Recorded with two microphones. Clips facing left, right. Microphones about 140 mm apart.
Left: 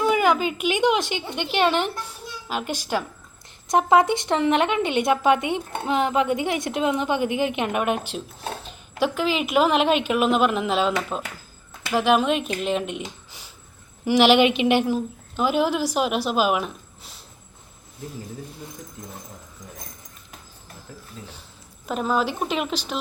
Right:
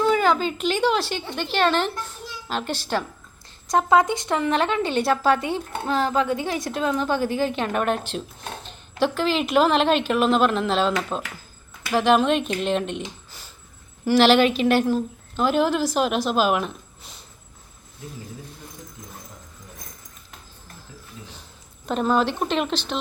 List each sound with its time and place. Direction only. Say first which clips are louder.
0.0 s speech: even; 15° left (ahead or behind)
21.8 s speech: right 2 dB; 5° left (ahead or behind)